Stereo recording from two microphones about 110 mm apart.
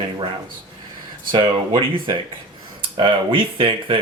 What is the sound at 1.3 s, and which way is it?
Speech, 50° right (ahead or behind).